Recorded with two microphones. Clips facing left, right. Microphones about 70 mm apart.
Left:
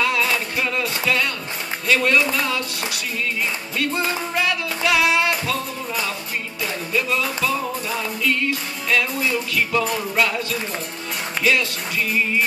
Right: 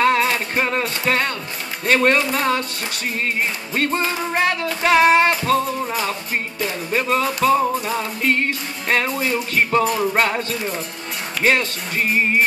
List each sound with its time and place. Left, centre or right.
0.0 s music: right
1.9 s speech: right
3.2 s music: right
10.1 s speech: right
11.4 s music: right